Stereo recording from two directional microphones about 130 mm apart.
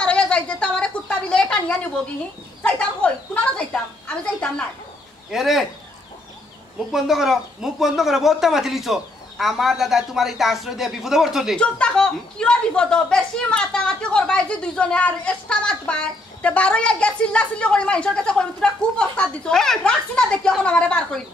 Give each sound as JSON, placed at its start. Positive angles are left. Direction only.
{"t": 0.0, "sound": "a sound", "side_deg": 10}
{"t": 2.6, "sound": "a woman's voice", "side_deg": 10}
{"t": 6.9, "sound": "a woman's voice", "side_deg": 0}